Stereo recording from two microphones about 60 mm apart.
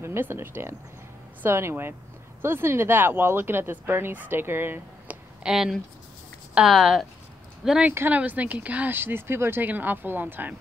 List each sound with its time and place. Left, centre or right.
0.0 s speech: right
5.4 s speech: centre
8.1 s speech: right
8.9 s speech: right
9.7 s speech: right